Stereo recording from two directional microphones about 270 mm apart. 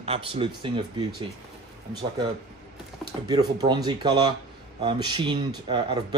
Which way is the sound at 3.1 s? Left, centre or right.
Centre.